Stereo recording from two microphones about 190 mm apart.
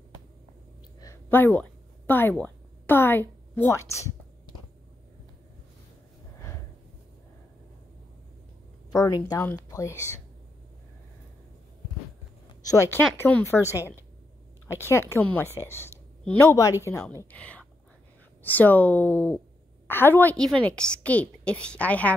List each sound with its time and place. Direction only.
1.0 s a sound: 15° left (ahead or behind)
8.9 s a woman's voice: 20° left (ahead or behind)
12.6 s a woman's voice: 15° left (ahead or behind)